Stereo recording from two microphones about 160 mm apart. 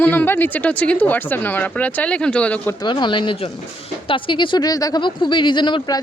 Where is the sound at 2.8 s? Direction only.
30° left (ahead or behind).